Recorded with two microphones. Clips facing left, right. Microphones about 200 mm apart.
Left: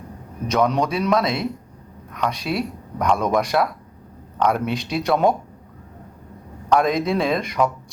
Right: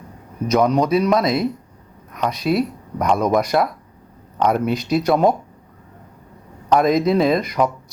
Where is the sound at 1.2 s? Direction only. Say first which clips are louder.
Right 4 dB; 40° right (ahead or behind).